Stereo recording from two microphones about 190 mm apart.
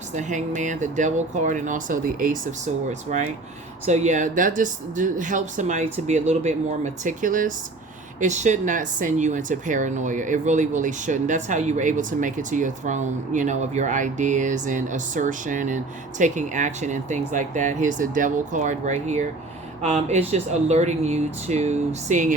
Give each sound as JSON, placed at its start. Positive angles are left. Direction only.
{"t": 0.1, "sound": "speech", "side_deg": -40}
{"t": 3.8, "sound": "speech", "side_deg": -40}